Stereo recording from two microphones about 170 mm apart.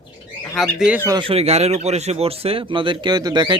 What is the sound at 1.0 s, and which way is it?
Speech, 25° right (ahead or behind).